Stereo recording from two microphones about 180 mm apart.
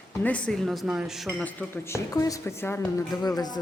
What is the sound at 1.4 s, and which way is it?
Speech, 15° left (ahead or behind).